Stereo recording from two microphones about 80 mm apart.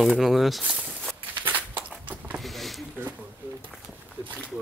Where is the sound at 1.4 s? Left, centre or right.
Right.